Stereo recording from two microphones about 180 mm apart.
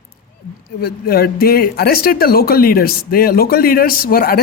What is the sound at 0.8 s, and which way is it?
Speech, 60° left (ahead or behind).